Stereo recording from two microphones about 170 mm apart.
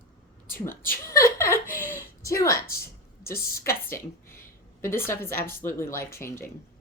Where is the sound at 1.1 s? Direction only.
15° left (ahead or behind).